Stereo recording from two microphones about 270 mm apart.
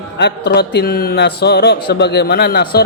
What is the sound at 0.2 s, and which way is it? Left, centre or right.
Speech, left.